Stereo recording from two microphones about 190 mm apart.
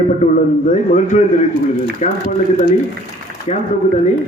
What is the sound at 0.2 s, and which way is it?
A man's voice, 40° left (ahead or behind).